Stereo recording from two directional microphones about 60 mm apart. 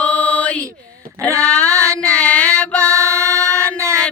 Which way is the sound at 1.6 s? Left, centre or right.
Right.